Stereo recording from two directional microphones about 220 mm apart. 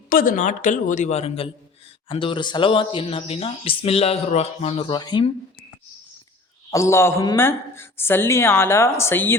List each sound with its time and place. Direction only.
0.1 s a man's voice: 40° left (ahead or behind); by 5.3 s 20° left (ahead or behind)
6.7 s a woman's voice: 15° left (ahead or behind)